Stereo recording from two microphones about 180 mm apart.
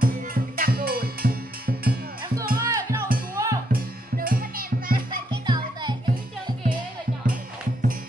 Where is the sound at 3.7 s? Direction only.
55° right (ahead or behind).